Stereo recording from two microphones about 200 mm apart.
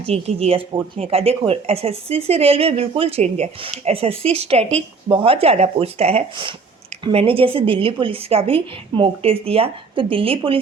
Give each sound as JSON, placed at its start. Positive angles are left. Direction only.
{"t": 0.0, "sound": "speech", "side_deg": -30}